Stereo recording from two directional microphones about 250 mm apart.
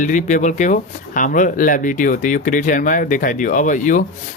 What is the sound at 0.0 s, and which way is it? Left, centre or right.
Speech, left.